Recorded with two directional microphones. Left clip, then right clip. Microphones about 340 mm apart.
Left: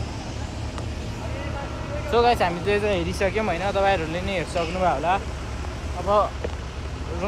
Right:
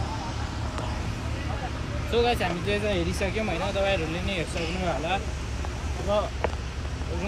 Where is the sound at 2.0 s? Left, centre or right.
Centre.